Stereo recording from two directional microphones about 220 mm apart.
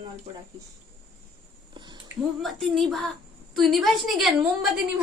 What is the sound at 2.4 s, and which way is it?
A woman's voice, centre (ahead or behind).